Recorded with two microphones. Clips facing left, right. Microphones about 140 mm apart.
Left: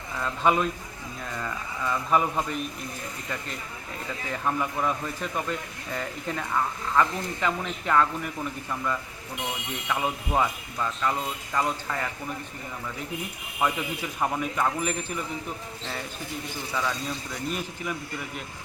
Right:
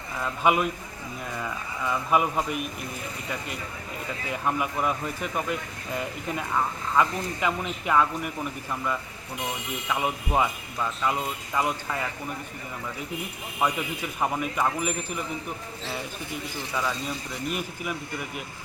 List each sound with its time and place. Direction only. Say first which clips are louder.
0.2 s speech: even; 10° right (ahead or behind)
4.3 s speech: even; 10° right (ahead or behind)
13.6 s speech: even; 5° right (ahead or behind)
16.7 s speech: even; 5° right (ahead or behind)